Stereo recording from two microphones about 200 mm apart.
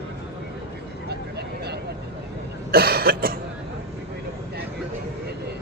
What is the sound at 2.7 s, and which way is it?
Cough, 50° right (ahead or behind).